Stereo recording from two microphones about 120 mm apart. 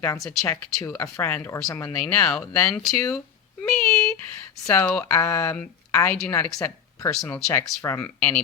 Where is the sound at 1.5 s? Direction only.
25° left (ahead or behind).